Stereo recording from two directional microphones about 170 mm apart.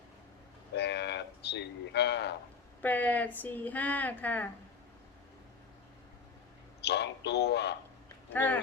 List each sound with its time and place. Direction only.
0.8 s speech: 85° left
2.8 s speech: 10° left (ahead or behind)
6.8 s a man's voice: 80° left